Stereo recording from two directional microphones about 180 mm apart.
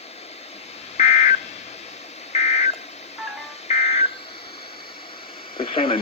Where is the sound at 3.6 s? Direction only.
35° left (ahead or behind).